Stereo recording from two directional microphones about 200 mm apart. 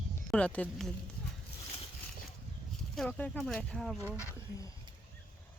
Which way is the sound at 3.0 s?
5° left (ahead or behind).